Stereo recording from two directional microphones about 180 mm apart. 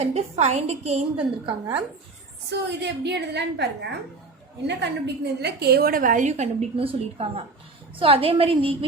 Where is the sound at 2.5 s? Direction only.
70° right (ahead or behind).